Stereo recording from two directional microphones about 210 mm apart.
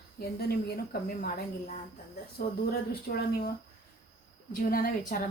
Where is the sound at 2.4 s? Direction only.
45° left (ahead or behind).